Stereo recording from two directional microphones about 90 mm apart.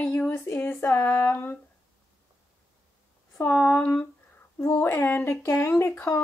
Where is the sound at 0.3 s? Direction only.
30° left (ahead or behind).